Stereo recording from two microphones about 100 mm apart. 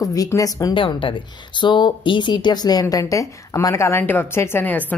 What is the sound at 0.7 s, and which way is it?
A woman's voice, 60° left (ahead or behind).